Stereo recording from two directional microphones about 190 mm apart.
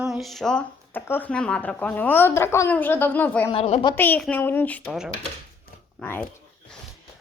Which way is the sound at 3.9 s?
10° left (ahead or behind).